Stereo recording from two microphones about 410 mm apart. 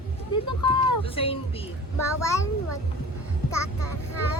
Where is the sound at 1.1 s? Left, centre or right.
Centre.